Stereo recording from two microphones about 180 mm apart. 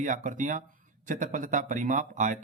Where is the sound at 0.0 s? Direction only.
45° right (ahead or behind).